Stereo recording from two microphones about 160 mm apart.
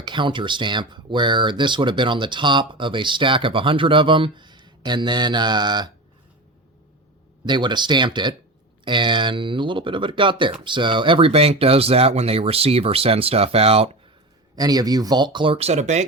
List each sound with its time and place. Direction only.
0.0 s speech: 30° right (ahead or behind)
7.4 s speech: 30° right (ahead or behind)
14.5 s speech: 25° right (ahead or behind); by 16.0 s 45° right (ahead or behind)